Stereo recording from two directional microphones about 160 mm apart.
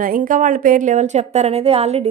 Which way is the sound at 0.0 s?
60° right (ahead or behind).